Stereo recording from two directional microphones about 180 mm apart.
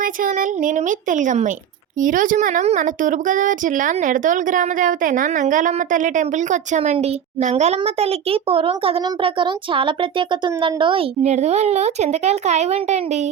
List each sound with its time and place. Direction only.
0.0 s speech: 50° right (ahead or behind); by 11.0 s 25° right (ahead or behind)
11.2 s speech: 40° right (ahead or behind)